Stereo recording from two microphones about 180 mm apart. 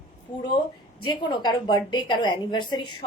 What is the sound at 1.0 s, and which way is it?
A woman's voice, 25° left (ahead or behind).